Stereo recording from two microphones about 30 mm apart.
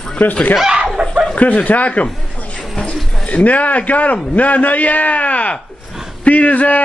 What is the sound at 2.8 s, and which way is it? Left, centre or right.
Pigeon, left.